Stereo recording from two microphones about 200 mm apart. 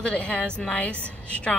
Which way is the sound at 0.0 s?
5° left (ahead or behind).